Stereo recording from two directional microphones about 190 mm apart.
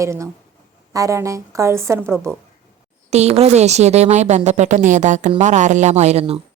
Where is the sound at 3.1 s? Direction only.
35° right (ahead or behind).